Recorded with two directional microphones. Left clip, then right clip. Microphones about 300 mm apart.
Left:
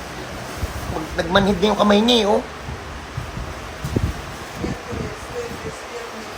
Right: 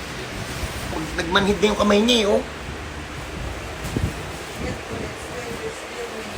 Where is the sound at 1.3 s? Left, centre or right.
Left.